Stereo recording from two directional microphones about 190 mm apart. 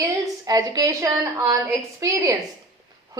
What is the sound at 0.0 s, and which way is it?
A woman's voice, 15° right (ahead or behind).